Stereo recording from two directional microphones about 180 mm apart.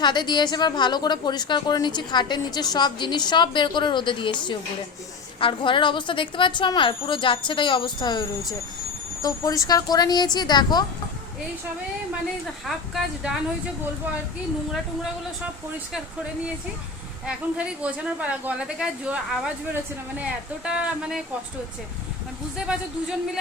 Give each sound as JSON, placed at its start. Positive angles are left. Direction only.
{"t": 0.0, "sound": "a woman's voice", "side_deg": 25}
{"t": 12.6, "sound": "a woman's voice", "side_deg": 0}
{"t": 17.2, "sound": "a woman's voice", "side_deg": -5}
{"t": 20.7, "sound": "a woman's voice", "side_deg": -5}
{"t": 22.5, "sound": "a woman's voice", "side_deg": -5}